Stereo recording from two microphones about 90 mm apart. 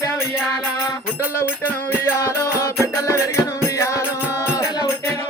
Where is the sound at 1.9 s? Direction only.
30° left (ahead or behind).